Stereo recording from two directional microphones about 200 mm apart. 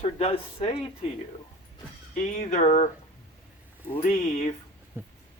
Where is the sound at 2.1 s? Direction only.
40° left (ahead or behind).